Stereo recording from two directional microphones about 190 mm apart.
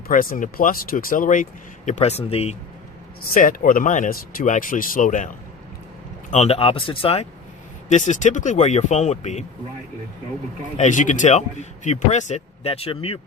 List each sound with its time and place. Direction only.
0.1 s speech: 45° left (ahead or behind)
3.3 s speech: 45° left (ahead or behind)
6.3 s speech: 35° left (ahead or behind)
10.8 s speech: 40° left (ahead or behind)